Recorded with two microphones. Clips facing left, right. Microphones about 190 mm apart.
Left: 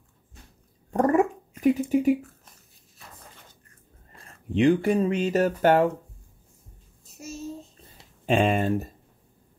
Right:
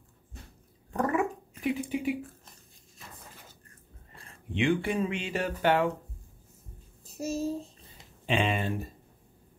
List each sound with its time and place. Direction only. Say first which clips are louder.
0.9 s gargling: left 7 dB; 40° left (ahead or behind)
4.5 s speech: left 7 dB; 40° left (ahead or behind)
7.1 s a child's voice: right 7 dB; 35° right (ahead or behind)
8.3 s speech: left 7 dB; 45° left (ahead or behind)